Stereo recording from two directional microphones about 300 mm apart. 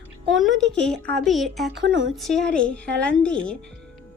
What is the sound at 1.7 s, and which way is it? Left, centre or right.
Speech, right.